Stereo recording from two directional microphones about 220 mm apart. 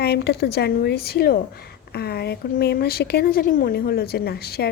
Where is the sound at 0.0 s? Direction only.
45° left (ahead or behind).